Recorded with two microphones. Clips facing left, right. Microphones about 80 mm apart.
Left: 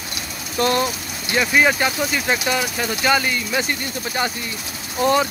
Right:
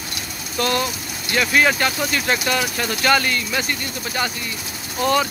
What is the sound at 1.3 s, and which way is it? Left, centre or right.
Speech, centre.